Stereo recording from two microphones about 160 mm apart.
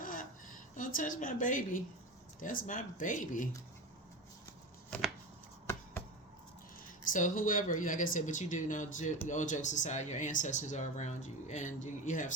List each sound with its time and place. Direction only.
0.8 s speech: 60° left (ahead or behind)
7.1 s speech: 55° left (ahead or behind)